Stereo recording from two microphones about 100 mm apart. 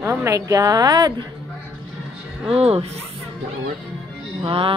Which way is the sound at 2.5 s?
90° right.